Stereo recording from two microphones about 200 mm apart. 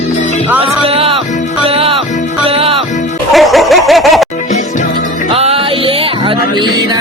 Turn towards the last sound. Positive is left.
turn(degrees=-30)  # may be behind; listen again after turning